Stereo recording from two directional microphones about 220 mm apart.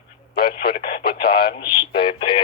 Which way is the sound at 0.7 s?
45° left (ahead or behind).